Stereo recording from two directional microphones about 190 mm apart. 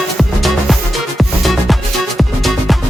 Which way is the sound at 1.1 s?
Centre (ahead or behind).